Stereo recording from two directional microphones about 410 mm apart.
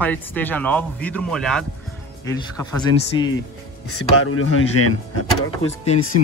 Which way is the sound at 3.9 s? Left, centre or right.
Left.